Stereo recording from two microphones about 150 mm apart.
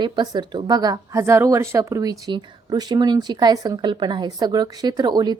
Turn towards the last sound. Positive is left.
turn(degrees=-30)  # may be behind; listen again after turning